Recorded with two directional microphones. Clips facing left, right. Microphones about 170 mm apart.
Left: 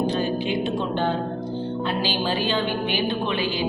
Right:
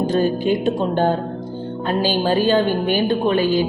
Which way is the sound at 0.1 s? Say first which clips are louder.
Right 6 dB; 45° right (ahead or behind).